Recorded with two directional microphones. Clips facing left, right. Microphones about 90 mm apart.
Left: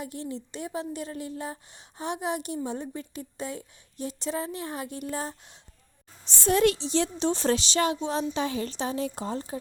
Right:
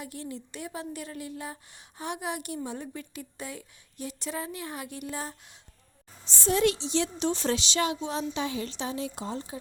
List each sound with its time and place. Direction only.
0.0 s a woman's voice: 30° left (ahead or behind)
6.2 s a woman's voice: 60° left (ahead or behind)